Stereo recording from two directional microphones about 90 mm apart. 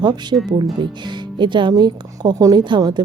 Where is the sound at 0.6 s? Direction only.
55° right (ahead or behind).